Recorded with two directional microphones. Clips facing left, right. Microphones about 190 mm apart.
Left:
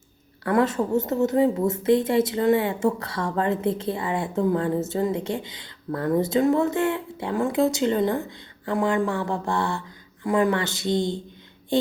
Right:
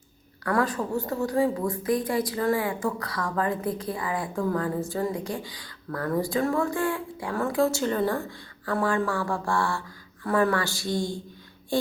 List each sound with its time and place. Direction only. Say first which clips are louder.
0.4 s a woman's voice: left 4 dB; 25° left (ahead or behind)